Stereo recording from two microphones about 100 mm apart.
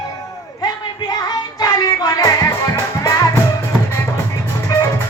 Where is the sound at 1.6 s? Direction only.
40° left (ahead or behind).